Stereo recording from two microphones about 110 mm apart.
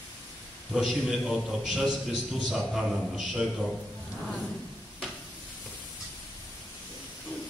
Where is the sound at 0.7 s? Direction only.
Centre (ahead or behind).